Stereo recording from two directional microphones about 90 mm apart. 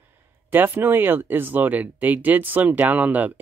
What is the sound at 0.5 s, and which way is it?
Speech, 20° right (ahead or behind).